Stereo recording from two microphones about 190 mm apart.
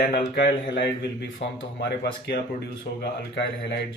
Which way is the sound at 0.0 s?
55° left (ahead or behind).